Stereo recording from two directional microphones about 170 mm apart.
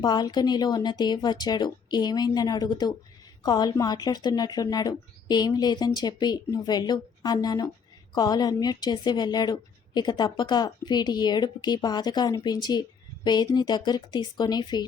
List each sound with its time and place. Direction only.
0.0 s a woman's voice: 25° left (ahead or behind)